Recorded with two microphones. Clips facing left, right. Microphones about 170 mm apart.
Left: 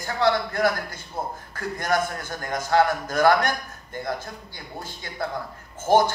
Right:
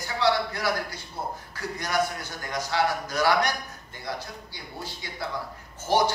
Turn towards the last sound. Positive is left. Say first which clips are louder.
# left 5 dB
turn(degrees=50)  # may be behind; listen again after turning